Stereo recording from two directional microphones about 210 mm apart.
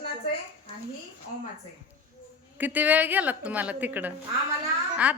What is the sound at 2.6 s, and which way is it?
A woman's voice, 10° right (ahead or behind).